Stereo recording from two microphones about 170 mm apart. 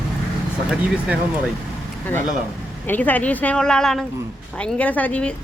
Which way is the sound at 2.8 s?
10° left (ahead or behind).